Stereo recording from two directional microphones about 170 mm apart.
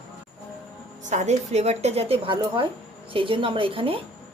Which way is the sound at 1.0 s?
45° right (ahead or behind).